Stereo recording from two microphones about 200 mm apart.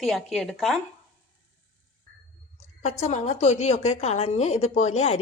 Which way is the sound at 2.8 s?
35° left (ahead or behind).